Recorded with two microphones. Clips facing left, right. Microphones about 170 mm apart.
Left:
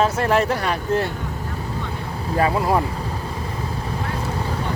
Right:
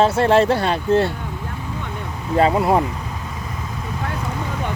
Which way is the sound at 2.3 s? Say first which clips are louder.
Right 3 dB; 25° right (ahead or behind).